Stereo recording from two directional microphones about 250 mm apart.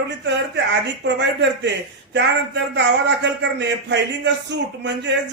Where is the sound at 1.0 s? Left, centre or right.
Right.